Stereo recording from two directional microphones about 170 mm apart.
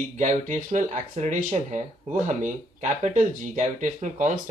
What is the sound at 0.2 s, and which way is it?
Speech, 45° right (ahead or behind).